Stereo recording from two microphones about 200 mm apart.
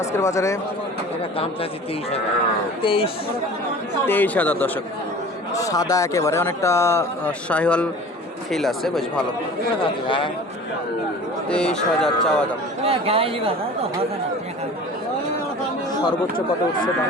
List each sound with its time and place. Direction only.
0.0 s speech: 15° left (ahead or behind)
2.8 s speech: 25° left (ahead or behind)
4.0 s a man's voice: 10° left (ahead or behind)
11.4 s a man's voice: 5° left (ahead or behind)
12.8 s speech: 30° right (ahead or behind)